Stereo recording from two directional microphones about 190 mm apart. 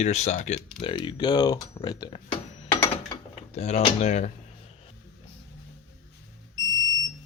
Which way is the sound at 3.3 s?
35° left (ahead or behind).